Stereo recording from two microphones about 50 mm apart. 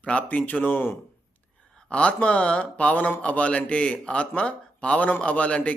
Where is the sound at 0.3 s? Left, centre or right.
Left.